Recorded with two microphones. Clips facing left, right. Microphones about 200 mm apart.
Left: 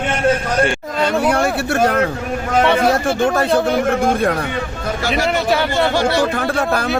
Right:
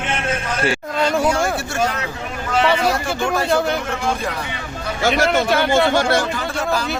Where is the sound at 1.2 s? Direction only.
60° left (ahead or behind).